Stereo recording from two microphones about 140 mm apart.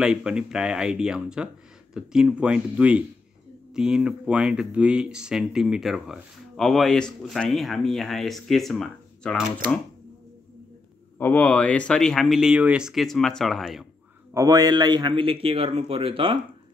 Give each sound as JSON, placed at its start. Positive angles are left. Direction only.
{"t": 0.0, "sound": "speech", "side_deg": -5}
{"t": 11.1, "sound": "speech", "side_deg": 10}
{"t": 14.3, "sound": "a man's voice", "side_deg": -25}